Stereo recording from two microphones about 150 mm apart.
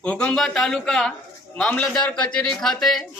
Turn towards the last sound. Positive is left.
turn(degrees=0)  # may be behind; listen again after turning